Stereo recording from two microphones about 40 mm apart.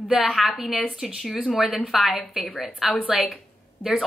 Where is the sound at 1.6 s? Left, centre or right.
Centre.